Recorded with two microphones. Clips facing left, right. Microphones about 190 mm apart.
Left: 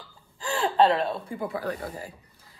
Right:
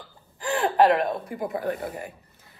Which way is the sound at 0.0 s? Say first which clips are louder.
Right 3 dB; 20° right (ahead or behind).